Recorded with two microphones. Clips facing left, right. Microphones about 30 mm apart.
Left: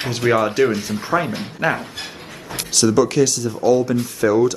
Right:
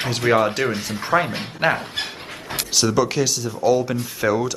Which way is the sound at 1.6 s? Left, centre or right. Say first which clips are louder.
Even; right.